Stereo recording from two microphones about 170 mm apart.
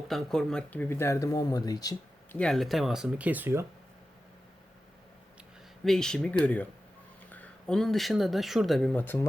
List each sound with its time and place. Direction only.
0.1 s speech: 5° left (ahead or behind); by 2.0 s 25° left (ahead or behind)
2.3 s speech: 5° left (ahead or behind); by 3.7 s 15° right (ahead or behind)
5.8 s speech: 5° left (ahead or behind)